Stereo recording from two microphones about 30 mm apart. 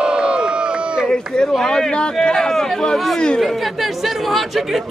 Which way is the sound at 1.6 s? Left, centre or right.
Centre.